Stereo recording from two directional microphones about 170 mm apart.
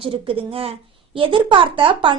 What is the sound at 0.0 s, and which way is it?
A woman's voice, 35° right (ahead or behind).